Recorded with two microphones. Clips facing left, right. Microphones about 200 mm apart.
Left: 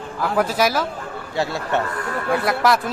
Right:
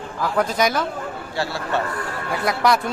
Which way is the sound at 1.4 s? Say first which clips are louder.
Left 3 dB; 20° left (ahead or behind).